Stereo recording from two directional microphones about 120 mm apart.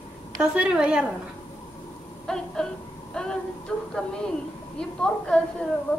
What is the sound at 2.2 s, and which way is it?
A woman's voice, 5° left (ahead or behind).